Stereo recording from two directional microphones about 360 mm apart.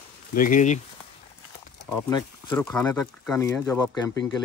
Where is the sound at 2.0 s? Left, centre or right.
Centre.